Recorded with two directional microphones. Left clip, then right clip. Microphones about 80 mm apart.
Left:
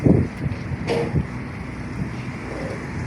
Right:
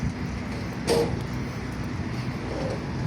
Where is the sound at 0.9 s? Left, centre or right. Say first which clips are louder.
Even; right.